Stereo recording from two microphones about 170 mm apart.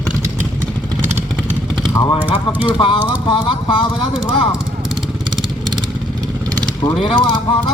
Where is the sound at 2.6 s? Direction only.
30° left (ahead or behind).